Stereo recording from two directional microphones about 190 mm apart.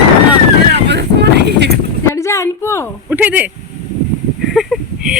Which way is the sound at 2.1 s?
15° left (ahead or behind).